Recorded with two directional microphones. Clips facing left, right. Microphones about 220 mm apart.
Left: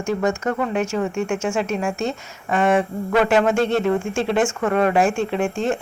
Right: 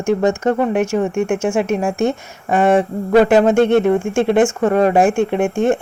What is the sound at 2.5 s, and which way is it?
Speech, 35° right (ahead or behind).